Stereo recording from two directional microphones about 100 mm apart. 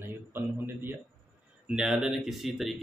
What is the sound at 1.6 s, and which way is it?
Speech, 5° right (ahead or behind).